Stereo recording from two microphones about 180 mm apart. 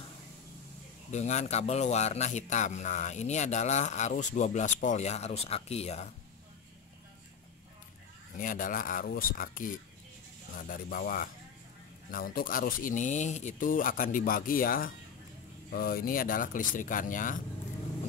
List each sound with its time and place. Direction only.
1.1 s speech: 40° left (ahead or behind)
8.4 s speech: 45° left (ahead or behind)